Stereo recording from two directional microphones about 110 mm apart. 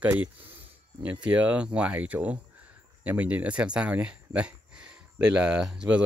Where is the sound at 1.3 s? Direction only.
15° right (ahead or behind).